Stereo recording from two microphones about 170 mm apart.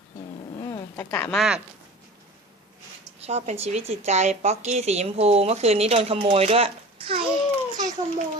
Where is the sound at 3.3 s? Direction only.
40° right (ahead or behind).